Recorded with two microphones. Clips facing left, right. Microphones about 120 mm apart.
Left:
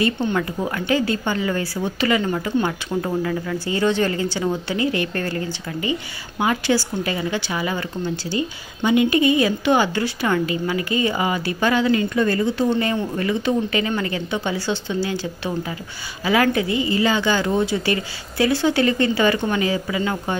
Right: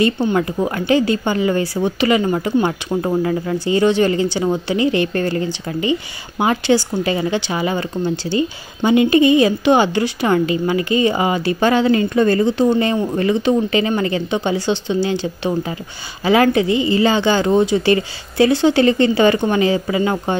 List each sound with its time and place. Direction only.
0.3 s a woman's voice: 25° right (ahead or behind)
3.6 s a woman's voice: 20° right (ahead or behind)